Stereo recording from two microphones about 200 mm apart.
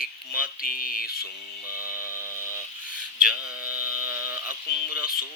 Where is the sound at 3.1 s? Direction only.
5° right (ahead or behind).